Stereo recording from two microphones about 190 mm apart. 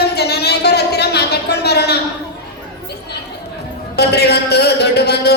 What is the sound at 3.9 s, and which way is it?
A man's voice, 60° left (ahead or behind).